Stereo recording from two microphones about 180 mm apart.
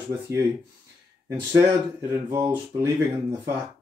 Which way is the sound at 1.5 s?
15° right (ahead or behind).